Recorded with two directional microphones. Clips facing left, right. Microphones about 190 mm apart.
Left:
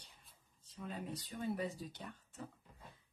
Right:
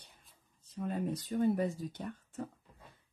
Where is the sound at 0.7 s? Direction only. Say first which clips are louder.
Right 9 dB; 50° right (ahead or behind).